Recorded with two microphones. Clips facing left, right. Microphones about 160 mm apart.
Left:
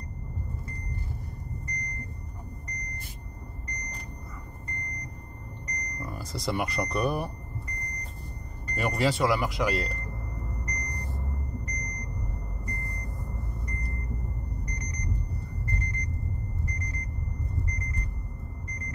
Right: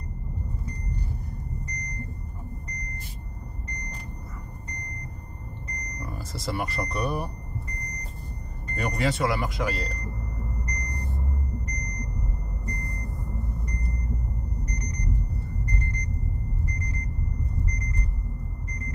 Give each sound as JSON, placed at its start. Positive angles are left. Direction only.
{"t": 6.0, "sound": "speech", "side_deg": 0}
{"t": 8.7, "sound": "speech", "side_deg": 0}